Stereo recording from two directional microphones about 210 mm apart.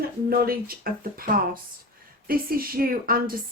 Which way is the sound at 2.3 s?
45° right (ahead or behind).